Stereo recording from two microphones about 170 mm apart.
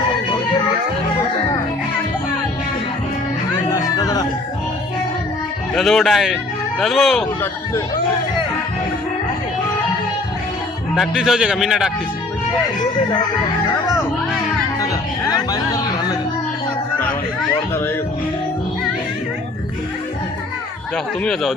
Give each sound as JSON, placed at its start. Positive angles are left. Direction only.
{"t": 3.7, "sound": "music", "side_deg": 20}
{"t": 5.7, "sound": "speech", "side_deg": 0}
{"t": 10.9, "sound": "a man's voice", "side_deg": -5}
{"t": 15.3, "sound": "chatter", "side_deg": 20}
{"t": 20.9, "sound": "a man's voice", "side_deg": 5}